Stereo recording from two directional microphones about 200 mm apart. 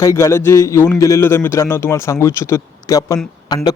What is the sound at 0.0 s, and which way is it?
A man's voice, 15° left (ahead or behind).